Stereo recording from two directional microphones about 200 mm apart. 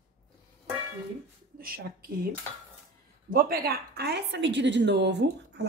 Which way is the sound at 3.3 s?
50° right (ahead or behind).